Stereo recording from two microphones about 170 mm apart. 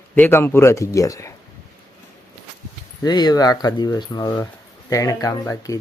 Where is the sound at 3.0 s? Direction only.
25° left (ahead or behind).